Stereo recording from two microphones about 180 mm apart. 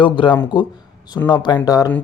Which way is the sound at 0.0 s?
25° left (ahead or behind).